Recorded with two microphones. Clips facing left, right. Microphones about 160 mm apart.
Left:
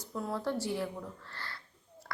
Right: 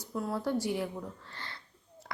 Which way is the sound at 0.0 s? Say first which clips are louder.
Right 2 dB; 10° right (ahead or behind).